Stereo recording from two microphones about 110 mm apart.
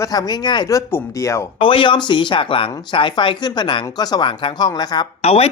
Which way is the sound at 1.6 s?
50° left (ahead or behind).